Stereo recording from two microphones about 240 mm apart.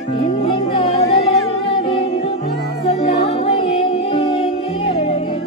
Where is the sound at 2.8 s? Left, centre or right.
Left.